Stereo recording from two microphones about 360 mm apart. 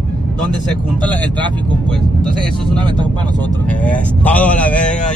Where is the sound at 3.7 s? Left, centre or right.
Centre.